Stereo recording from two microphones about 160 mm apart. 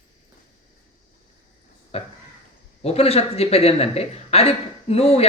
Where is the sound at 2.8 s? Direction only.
40° left (ahead or behind).